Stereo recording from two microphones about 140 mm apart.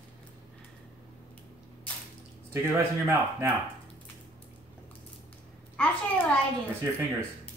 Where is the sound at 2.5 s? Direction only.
20° right (ahead or behind).